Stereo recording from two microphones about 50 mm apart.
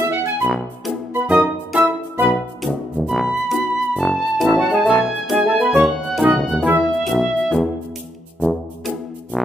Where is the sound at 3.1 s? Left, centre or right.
Centre.